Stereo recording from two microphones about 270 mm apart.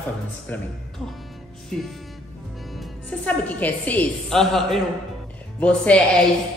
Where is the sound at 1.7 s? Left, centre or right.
Centre.